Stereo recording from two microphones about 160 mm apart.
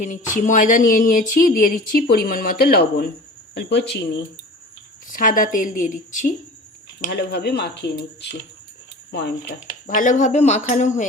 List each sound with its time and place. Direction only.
0.0 s speech: 50° left (ahead or behind); by 3.1 s 75° left (ahead or behind)
3.5 s speech: 90° left
5.0 s speech: 55° left (ahead or behind)
7.1 s speech: 90° left; by 11.0 s 50° left (ahead or behind)